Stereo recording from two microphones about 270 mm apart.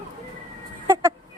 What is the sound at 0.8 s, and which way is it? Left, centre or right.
Chicken, centre.